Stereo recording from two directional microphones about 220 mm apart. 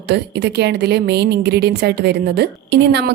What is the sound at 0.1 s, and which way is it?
A woman's voice, 50° right (ahead or behind).